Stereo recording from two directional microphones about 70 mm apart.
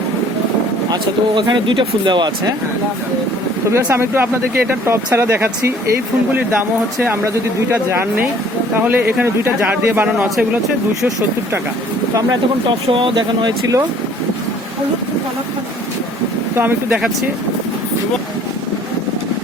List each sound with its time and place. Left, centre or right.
1.4 s speech: right
3.9 s speech: right
6.3 s a man's voice: right
13.1 s speech: right
16.6 s a man's voice: right